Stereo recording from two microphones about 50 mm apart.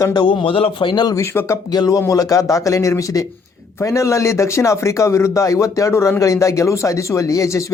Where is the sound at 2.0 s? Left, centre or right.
Left.